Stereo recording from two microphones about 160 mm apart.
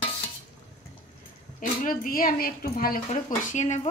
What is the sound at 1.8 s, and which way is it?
A woman's voice, 60° left (ahead or behind).